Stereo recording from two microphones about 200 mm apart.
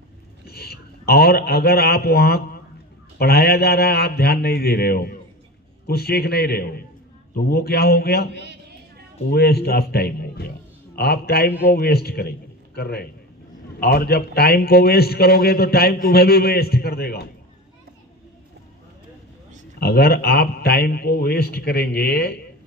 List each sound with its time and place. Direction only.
0.5 s a man's voice: 50° left (ahead or behind)
9.3 s a man's voice: 50° left (ahead or behind)
19.8 s a man's voice: 50° left (ahead or behind)